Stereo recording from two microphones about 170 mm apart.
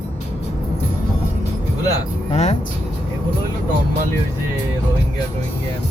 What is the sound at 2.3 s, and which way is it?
Speech, 40° left (ahead or behind).